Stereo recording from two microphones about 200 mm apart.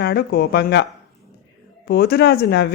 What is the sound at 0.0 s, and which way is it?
Speech, 55° left (ahead or behind).